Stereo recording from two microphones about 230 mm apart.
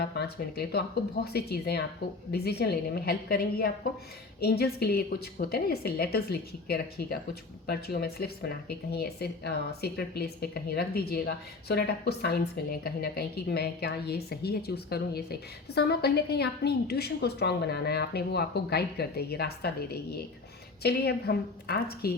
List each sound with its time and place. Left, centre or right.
0.0 s a woman's voice: left